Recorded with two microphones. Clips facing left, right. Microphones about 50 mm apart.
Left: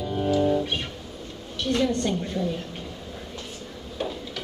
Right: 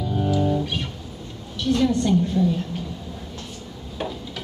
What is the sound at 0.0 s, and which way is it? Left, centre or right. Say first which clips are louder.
Music: right 2 dB; centre.